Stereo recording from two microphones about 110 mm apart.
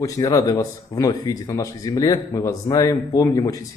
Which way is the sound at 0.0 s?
30° left (ahead or behind).